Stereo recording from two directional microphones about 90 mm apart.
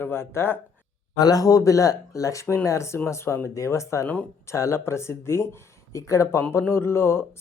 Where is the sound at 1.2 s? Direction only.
45° left (ahead or behind).